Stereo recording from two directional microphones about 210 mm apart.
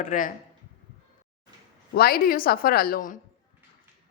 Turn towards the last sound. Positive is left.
turn(degrees=45)  # may be behind; listen again after turning